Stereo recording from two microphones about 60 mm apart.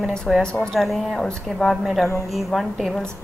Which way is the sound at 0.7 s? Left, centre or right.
Centre.